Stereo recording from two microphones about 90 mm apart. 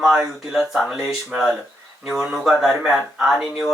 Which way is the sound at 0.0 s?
Centre (ahead or behind).